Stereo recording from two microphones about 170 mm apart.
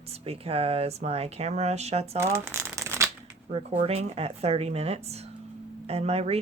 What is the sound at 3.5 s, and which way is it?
Speech, 35° right (ahead or behind).